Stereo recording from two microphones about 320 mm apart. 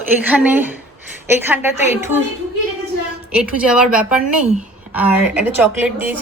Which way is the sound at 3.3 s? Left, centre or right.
Centre.